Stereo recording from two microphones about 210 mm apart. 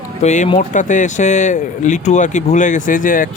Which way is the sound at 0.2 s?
35° left (ahead or behind).